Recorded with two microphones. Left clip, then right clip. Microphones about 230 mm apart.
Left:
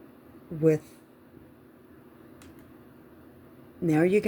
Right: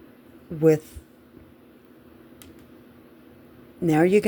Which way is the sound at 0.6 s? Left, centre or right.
Right.